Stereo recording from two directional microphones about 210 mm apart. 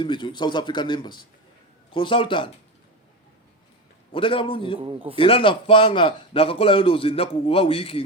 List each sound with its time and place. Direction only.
0.0 s a man's voice: 20° left (ahead or behind)
4.1 s a man's voice: 25° left (ahead or behind)